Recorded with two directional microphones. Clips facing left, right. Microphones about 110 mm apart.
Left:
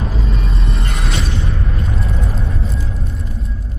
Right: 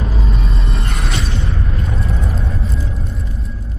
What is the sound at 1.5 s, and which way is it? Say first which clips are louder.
Mechanisms: even; centre (ahead or behind).